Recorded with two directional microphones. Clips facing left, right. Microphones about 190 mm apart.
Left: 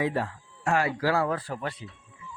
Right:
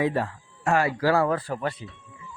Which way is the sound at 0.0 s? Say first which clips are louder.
Right 3 dB; 50° right (ahead or behind).